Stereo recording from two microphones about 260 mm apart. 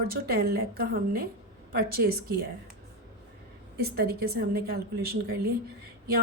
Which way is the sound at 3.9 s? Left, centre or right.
Right.